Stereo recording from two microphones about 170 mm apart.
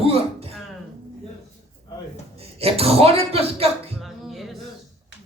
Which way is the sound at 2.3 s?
35° right (ahead or behind).